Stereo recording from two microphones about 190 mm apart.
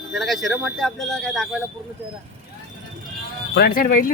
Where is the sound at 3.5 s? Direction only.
55° left (ahead or behind).